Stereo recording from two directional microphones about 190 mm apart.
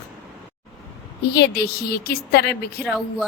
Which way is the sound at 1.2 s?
60° left (ahead or behind).